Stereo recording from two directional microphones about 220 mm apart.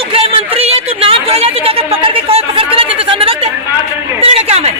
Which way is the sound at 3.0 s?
25° right (ahead or behind).